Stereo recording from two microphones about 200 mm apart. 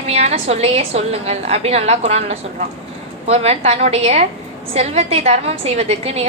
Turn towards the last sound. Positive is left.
turn(degrees=-30)  # may be behind; listen again after turning